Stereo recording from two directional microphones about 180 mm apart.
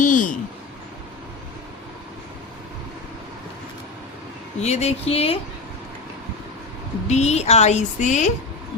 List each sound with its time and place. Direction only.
0.0 s a sound: 45° left (ahead or behind)
4.6 s speech: 35° left (ahead or behind)
7.1 s speech: 40° left (ahead or behind)